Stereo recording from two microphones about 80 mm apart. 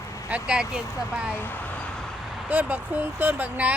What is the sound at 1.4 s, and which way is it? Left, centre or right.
Speech, left.